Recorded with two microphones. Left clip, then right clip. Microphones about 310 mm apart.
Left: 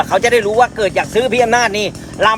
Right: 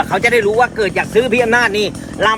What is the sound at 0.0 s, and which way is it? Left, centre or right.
Speech, left.